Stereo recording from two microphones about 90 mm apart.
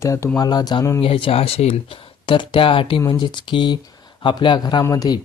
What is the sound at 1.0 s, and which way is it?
Speech, 90° left.